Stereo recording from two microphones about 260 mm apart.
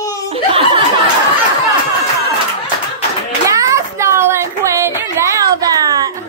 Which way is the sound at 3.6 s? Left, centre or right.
Centre.